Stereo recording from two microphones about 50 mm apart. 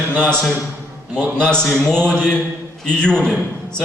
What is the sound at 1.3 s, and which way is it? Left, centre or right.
A man's voice, centre.